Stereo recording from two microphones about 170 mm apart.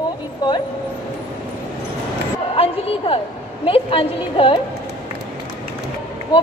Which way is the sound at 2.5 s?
35° left (ahead or behind).